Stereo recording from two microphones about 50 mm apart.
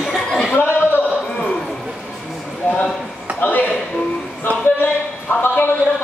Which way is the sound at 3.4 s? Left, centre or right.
Left.